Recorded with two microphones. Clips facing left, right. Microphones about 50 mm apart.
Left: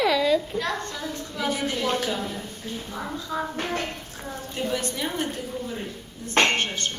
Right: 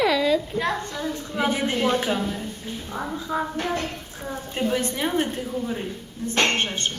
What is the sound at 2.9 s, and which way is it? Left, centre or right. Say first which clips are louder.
Speech: right 5 dB; centre.